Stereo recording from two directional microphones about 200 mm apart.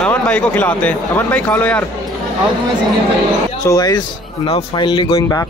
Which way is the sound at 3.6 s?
15° left (ahead or behind).